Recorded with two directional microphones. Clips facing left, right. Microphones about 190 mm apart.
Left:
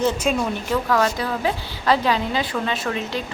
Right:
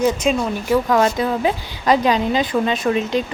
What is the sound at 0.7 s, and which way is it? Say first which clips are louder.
A woman's voice: right 5 dB; 20° right (ahead or behind).